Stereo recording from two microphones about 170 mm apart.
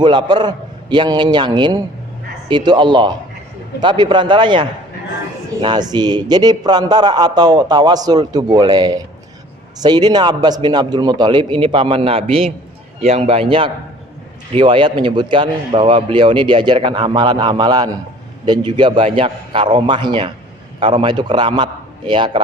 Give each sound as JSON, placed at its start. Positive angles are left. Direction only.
{"t": 0.0, "sound": "a man's voice", "side_deg": -25}
{"t": 5.6, "sound": "a man's voice", "side_deg": -25}